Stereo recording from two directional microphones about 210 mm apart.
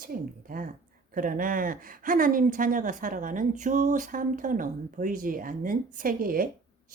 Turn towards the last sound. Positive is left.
turn(degrees=-40)  # may be behind; listen again after turning